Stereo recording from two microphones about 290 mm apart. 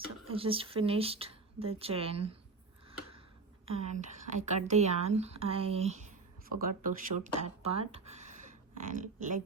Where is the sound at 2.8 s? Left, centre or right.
Centre.